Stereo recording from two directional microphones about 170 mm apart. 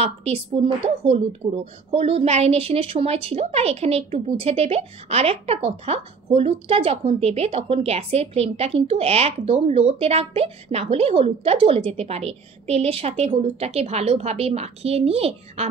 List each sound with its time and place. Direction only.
0.0 s a woman's voice: 35° right (ahead or behind)